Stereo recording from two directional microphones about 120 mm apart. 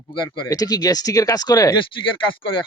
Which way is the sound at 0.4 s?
30° left (ahead or behind).